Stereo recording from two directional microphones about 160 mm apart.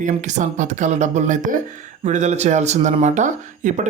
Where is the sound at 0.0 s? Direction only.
50° right (ahead or behind).